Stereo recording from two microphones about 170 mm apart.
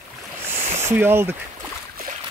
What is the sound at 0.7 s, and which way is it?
Speech, 15° right (ahead or behind).